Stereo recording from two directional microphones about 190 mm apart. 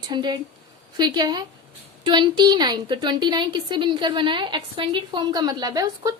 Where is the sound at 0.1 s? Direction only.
25° right (ahead or behind).